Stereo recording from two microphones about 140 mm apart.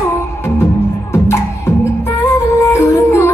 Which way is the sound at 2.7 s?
20° left (ahead or behind).